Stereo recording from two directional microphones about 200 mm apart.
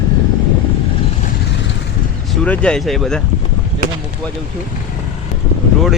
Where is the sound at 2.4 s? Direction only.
5° left (ahead or behind).